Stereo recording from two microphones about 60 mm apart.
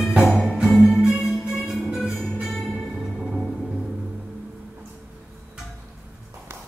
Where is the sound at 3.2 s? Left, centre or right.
Centre.